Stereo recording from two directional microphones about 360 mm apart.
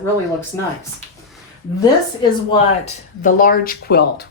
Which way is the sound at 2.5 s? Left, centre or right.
Centre.